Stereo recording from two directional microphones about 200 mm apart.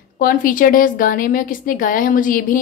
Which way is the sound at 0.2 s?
45° left (ahead or behind).